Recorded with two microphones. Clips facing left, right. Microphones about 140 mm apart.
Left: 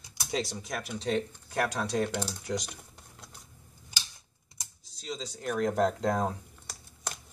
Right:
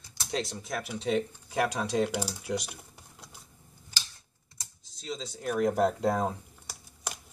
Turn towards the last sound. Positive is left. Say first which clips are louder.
# even
turn(degrees=-5)  # may be behind; listen again after turning